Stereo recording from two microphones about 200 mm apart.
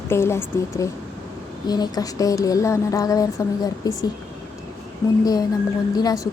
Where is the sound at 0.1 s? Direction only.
10° left (ahead or behind).